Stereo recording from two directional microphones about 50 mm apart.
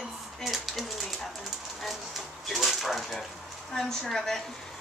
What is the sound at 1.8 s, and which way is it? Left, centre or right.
Bird, centre.